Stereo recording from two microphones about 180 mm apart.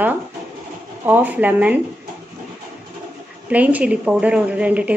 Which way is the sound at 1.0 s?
10° right (ahead or behind).